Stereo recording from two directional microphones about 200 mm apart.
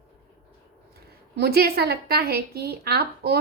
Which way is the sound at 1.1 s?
55° right (ahead or behind).